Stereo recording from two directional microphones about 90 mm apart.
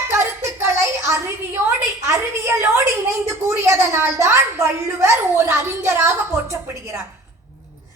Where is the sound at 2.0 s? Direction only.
30° right (ahead or behind).